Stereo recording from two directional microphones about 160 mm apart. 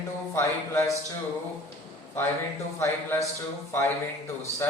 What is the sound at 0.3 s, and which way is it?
Speech, 15° left (ahead or behind).